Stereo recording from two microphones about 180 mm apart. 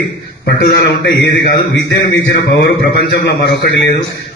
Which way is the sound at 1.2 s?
65° left (ahead or behind).